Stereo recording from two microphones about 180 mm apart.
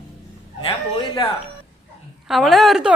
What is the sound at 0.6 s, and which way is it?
Speech, 25° left (ahead or behind).